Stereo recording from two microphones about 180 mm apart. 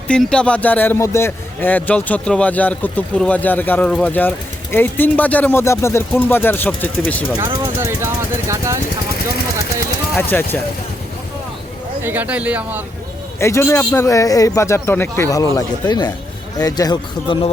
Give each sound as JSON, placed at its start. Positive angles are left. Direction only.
{"t": 0.1, "sound": "a man's voice", "side_deg": 5}
{"t": 7.8, "sound": "speech", "side_deg": -15}
{"t": 10.2, "sound": "a man's voice", "side_deg": 10}
{"t": 12.0, "sound": "a man's voice", "side_deg": -10}
{"t": 13.4, "sound": "a man's voice", "side_deg": 15}